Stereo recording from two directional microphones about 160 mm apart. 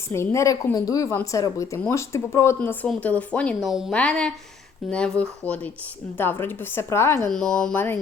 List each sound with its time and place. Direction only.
0.1 s a woman's voice: 15° left (ahead or behind)
7.3 s speech: 5° left (ahead or behind)